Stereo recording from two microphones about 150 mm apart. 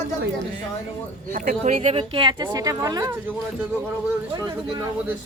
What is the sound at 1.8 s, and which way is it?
A woman's voice, 40° right (ahead or behind).